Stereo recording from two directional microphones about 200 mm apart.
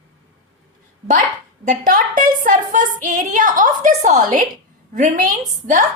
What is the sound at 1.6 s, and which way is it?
A woman's voice, 45° right (ahead or behind).